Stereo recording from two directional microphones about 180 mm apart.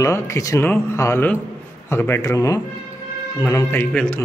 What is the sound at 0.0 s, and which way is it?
Speech, 15° left (ahead or behind).